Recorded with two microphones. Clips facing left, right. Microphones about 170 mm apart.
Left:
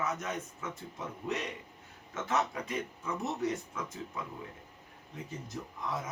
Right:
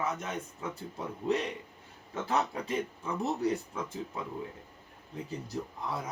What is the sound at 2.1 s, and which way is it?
Speech, 35° right (ahead or behind).